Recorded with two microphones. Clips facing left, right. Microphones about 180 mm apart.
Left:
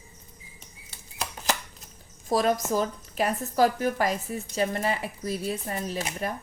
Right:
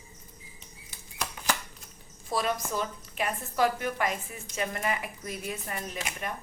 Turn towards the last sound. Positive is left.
turn(degrees=35)  # may be behind; listen again after turning